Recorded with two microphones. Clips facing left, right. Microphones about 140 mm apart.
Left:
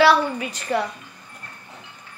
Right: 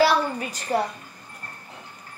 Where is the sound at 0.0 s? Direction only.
40° right (ahead or behind).